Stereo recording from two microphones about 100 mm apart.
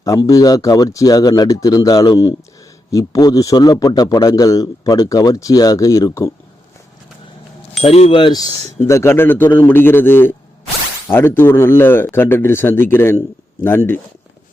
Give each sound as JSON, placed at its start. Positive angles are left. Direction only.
{"t": 0.0, "sound": "a man's voice", "side_deg": 35}
{"t": 7.9, "sound": "speech", "side_deg": 85}
{"t": 8.2, "sound": "a man's voice", "side_deg": 40}
{"t": 8.8, "sound": "speech", "side_deg": 25}